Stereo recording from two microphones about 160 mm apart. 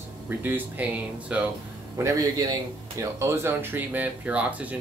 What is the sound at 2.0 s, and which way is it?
A man's voice, 25° right (ahead or behind).